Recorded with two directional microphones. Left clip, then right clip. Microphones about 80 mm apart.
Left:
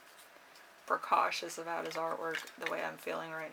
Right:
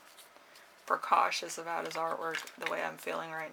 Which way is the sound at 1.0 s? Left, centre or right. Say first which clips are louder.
Right 3 dB; right.